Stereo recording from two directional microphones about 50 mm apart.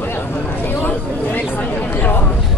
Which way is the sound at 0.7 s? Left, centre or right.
Left.